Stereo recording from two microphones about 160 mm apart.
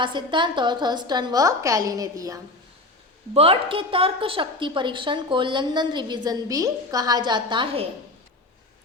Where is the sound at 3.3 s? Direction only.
35° right (ahead or behind).